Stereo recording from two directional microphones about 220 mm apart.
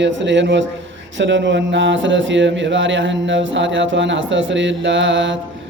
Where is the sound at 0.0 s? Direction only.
55° right (ahead or behind).